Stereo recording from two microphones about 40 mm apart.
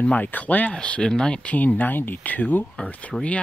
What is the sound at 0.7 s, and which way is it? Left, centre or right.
Speech, left.